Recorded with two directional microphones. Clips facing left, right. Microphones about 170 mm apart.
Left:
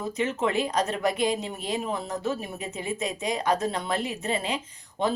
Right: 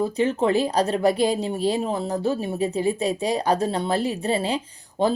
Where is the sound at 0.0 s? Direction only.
35° right (ahead or behind).